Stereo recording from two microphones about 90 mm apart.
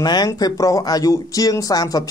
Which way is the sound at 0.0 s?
45° left (ahead or behind).